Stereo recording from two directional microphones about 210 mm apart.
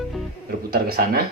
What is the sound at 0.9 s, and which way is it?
Speech, 45° right (ahead or behind).